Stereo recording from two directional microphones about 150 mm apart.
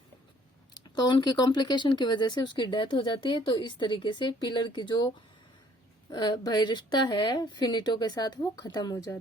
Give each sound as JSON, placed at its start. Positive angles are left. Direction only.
{"t": 0.9, "sound": "speech", "side_deg": 30}